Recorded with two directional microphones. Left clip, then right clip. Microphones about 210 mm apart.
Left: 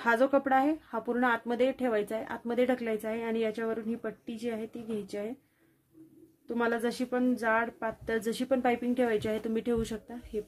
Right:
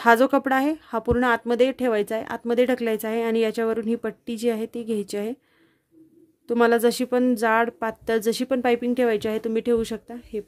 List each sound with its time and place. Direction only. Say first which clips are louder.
0.0 s speech: right 8 dB; 55° right (ahead or behind)
6.4 s speech: right 11 dB; 55° right (ahead or behind)